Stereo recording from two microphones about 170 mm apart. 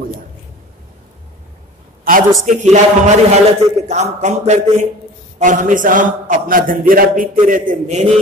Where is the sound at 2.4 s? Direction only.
45° right (ahead or behind).